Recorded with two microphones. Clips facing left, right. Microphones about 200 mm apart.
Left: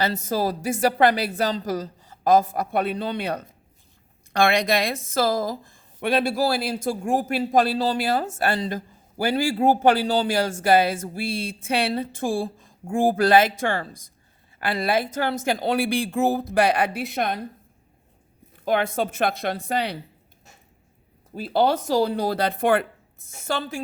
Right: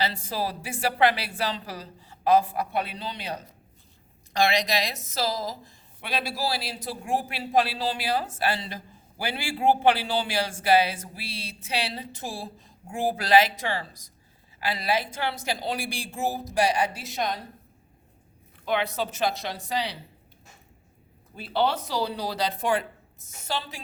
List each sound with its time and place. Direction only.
0.0 s speech: 45° left (ahead or behind)
18.6 s speech: 45° left (ahead or behind)
21.3 s speech: 40° left (ahead or behind)